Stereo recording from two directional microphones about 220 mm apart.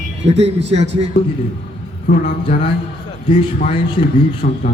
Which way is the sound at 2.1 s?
25° left (ahead or behind).